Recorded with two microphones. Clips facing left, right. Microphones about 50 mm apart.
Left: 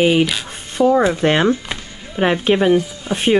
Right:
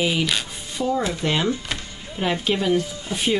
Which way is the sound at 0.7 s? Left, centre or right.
Left.